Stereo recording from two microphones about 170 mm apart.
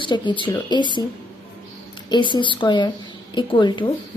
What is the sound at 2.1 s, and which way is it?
Speech, 30° left (ahead or behind).